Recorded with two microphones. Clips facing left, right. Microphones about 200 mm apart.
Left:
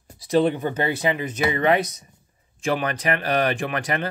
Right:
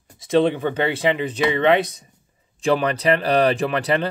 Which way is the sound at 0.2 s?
25° right (ahead or behind).